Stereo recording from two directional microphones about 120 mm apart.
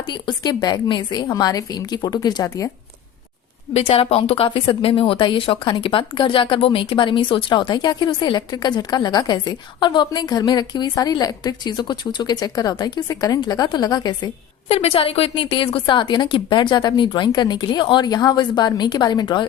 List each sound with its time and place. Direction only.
0.0 s a woman's voice: 35° left (ahead or behind)
3.8 s a woman's voice: 55° left (ahead or behind); by 14.3 s 35° left (ahead or behind)
14.7 s a woman's voice: 55° left (ahead or behind); by 19.5 s 40° left (ahead or behind)